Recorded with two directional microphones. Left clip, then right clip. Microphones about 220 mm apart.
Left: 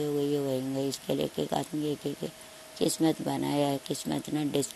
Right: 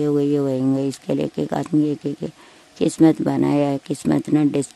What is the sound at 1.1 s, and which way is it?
Speech, 55° right (ahead or behind).